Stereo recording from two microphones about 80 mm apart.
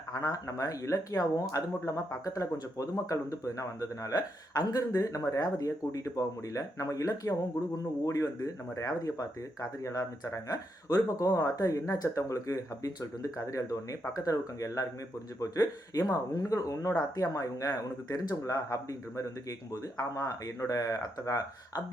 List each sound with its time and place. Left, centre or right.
0.1 s speech: left